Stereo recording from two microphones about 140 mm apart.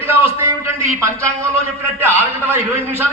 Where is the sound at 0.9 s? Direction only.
20° right (ahead or behind).